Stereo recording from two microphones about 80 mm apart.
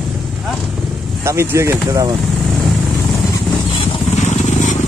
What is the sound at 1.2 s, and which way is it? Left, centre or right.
Speech, right.